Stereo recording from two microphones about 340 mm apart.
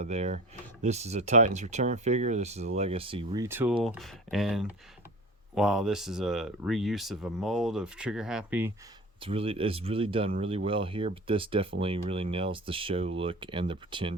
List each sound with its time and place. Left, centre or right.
0.0 s speech: centre
9.2 s speech: centre